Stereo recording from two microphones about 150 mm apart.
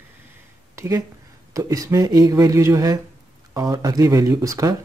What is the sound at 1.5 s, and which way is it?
Speech, 20° right (ahead or behind).